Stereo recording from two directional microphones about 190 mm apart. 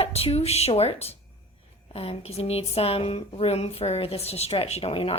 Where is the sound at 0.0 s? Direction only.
30° left (ahead or behind).